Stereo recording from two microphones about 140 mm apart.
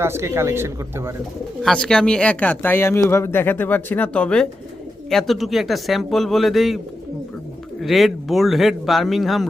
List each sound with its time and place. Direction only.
0.0 s speech: 20° right (ahead or behind)
1.6 s speech: 5° left (ahead or behind)
7.8 s speech: centre (ahead or behind)